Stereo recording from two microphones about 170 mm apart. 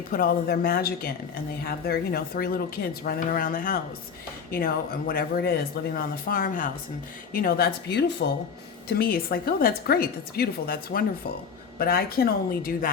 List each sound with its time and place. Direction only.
0.1 s a woman's voice: 60° left (ahead or behind); by 8.1 s 85° left
9.0 s speech: 60° left (ahead or behind)